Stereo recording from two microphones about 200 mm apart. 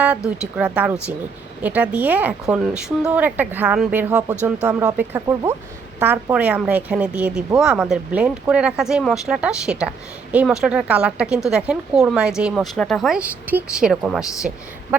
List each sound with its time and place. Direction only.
0.3 s a woman's voice: 5° right (ahead or behind)
14.5 s a woman's voice: 40° right (ahead or behind)